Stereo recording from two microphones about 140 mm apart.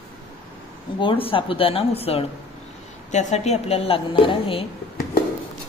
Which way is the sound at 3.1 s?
55° left (ahead or behind).